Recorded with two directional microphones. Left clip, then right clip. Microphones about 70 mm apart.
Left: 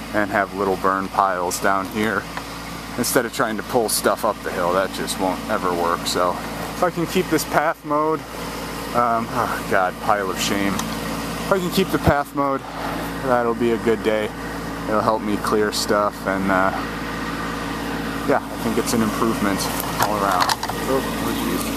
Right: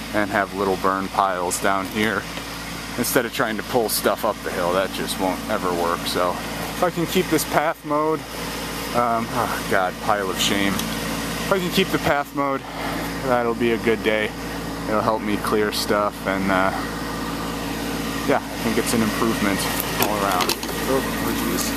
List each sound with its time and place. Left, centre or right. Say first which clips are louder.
0.1 s speech: left 1 dB; centre
3.0 s speech: left 1 dB; left
6.8 s speech: left 1 dB; centre
11.5 s speech: left 1 dB; left
12.2 s speech: left 2 dB; centre
13.7 s speech: left 1 dB; left
15.9 s speech: left 2 dB; centre
18.6 s speech: even; right
18.9 s speech: left 1 dB; centre
21.0 s speech: even; left